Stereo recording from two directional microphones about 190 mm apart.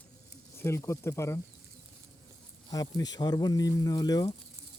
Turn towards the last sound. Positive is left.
turn(degrees=20)  # may be behind; listen again after turning